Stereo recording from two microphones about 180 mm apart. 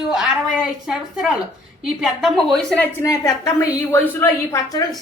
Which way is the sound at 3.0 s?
20° left (ahead or behind).